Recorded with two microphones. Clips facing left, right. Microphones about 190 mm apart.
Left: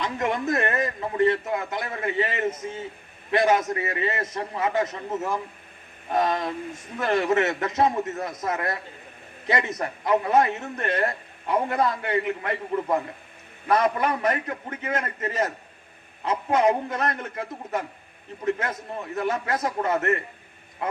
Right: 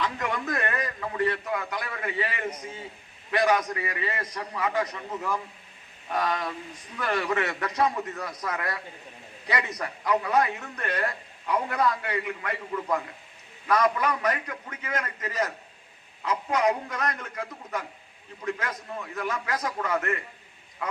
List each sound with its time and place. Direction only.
0.0 s a man's voice: 20° left (ahead or behind)